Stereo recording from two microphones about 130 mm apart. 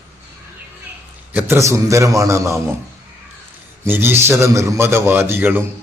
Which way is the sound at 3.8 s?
15° right (ahead or behind).